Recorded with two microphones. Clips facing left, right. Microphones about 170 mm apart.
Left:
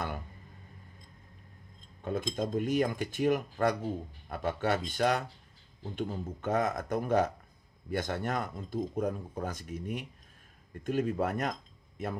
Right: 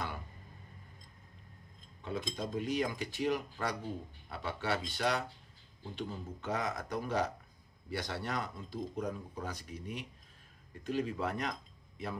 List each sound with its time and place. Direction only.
2.0 s speech: 50° left (ahead or behind)